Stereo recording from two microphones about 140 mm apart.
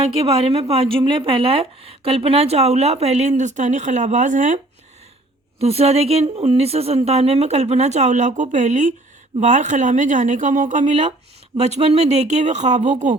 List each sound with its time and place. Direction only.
0.0 s speech: 45° right (ahead or behind); by 4.6 s 60° right (ahead or behind)
5.5 s speech: 45° right (ahead or behind)